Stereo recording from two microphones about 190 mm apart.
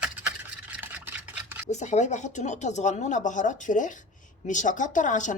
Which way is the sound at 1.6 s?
40° left (ahead or behind).